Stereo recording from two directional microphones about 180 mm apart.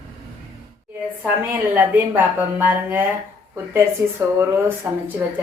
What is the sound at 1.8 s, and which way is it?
Speech, 10° right (ahead or behind).